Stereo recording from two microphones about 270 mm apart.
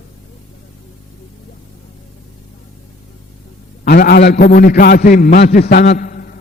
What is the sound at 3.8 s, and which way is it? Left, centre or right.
A man's voice, left.